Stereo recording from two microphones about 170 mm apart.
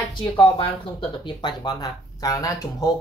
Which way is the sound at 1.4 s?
25° left (ahead or behind).